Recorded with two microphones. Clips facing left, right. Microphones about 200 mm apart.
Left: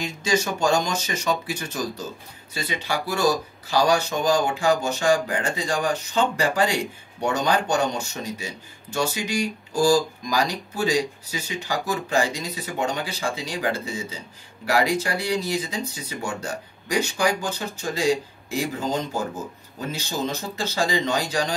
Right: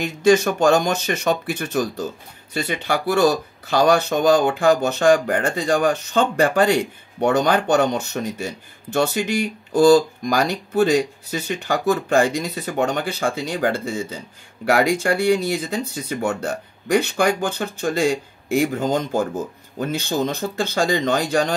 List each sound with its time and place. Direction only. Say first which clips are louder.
0.0 s speech: right 9 dB; 55° right (ahead or behind)
19.8 s speech: right 6 dB; 60° right (ahead or behind)